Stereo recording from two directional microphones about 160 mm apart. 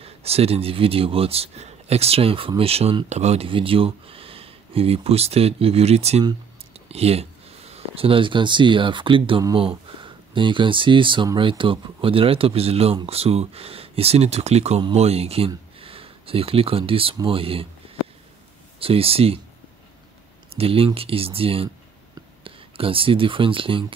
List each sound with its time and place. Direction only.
0.0 s speech: 40° right (ahead or behind)
18.8 s speech: 35° right (ahead or behind)
20.5 s speech: 35° right (ahead or behind)